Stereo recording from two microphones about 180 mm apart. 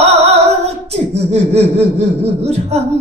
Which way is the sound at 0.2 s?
35° right (ahead or behind).